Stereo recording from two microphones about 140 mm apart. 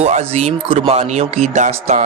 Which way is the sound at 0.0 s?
50° right (ahead or behind).